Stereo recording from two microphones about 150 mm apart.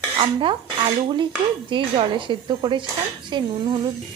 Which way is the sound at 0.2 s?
35° right (ahead or behind).